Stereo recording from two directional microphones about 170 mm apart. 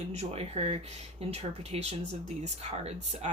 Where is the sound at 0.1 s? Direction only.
35° right (ahead or behind).